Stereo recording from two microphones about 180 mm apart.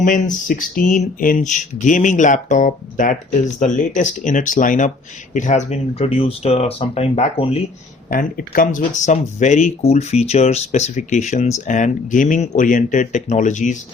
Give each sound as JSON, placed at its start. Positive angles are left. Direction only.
{"t": 0.4, "sound": "speech", "side_deg": 50}
{"t": 8.1, "sound": "speech", "side_deg": 50}